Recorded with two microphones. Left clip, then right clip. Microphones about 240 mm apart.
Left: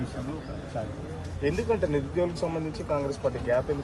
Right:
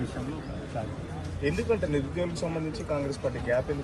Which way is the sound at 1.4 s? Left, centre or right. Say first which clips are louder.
Left 1 dB; left.